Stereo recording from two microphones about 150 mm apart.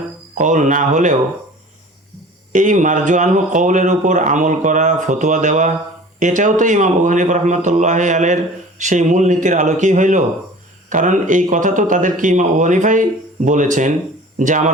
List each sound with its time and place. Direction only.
0.3 s speech: 55° right (ahead or behind)
2.5 s speech: 55° right (ahead or behind)